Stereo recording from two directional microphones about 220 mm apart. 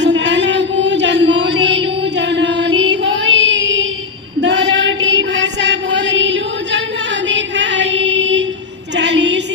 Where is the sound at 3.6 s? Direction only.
55° right (ahead or behind).